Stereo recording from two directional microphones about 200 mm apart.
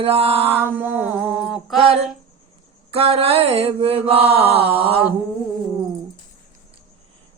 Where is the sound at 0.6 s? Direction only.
10° right (ahead or behind).